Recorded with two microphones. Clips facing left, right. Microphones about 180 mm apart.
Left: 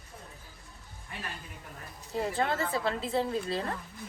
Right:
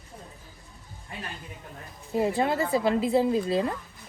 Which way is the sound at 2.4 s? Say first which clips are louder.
Right 5 dB; 20° right (ahead or behind).